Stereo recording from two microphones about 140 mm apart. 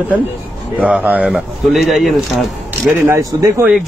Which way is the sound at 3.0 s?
20° right (ahead or behind).